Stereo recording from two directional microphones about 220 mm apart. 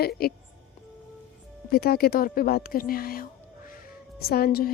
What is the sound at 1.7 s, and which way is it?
A woman's voice, 45° left (ahead or behind).